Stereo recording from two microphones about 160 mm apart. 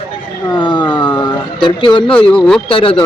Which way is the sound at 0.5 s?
30° left (ahead or behind).